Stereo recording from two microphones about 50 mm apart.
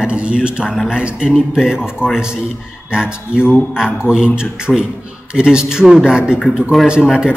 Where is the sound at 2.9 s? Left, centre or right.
Centre.